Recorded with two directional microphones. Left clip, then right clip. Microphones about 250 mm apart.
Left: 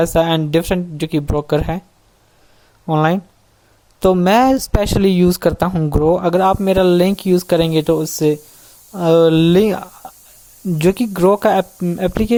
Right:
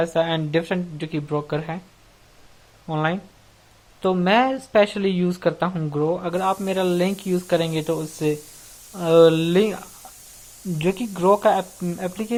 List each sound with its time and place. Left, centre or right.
0.0 s speech: left
2.8 s speech: left